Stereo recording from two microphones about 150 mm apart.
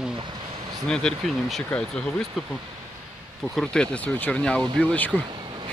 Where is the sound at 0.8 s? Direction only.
5° left (ahead or behind).